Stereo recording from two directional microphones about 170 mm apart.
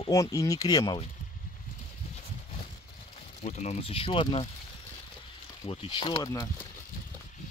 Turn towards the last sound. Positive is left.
turn(degrees=20)  # may be behind; listen again after turning